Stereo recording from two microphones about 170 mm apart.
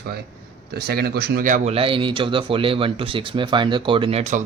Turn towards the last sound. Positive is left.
turn(degrees=-40)  # may be behind; listen again after turning